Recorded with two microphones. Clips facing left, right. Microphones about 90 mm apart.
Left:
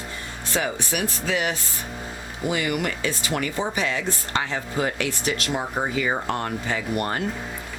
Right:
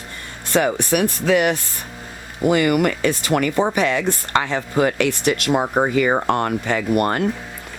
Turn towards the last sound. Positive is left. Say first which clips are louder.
# right 7 dB
turn(degrees=-60)  # may be behind; listen again after turning